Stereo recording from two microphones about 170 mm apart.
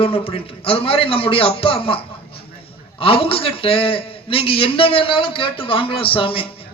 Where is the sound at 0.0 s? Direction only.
35° left (ahead or behind).